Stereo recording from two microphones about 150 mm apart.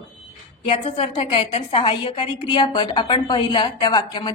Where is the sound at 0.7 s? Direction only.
40° left (ahead or behind).